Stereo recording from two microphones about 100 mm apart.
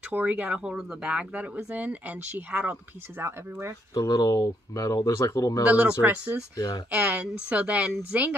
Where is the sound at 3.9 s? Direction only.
40° left (ahead or behind).